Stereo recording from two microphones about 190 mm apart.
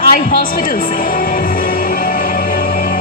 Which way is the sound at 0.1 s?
45° left (ahead or behind).